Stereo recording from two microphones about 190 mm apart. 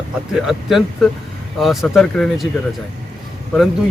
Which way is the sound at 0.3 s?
Centre (ahead or behind).